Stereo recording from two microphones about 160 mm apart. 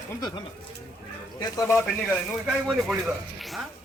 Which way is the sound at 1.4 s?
25° left (ahead or behind).